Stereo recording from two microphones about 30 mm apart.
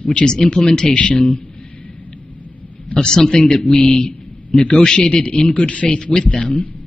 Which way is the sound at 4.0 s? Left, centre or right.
Left.